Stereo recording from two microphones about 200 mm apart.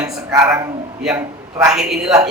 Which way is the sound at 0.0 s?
15° right (ahead or behind).